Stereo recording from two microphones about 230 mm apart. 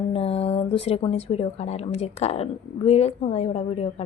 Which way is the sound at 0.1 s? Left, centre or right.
Left.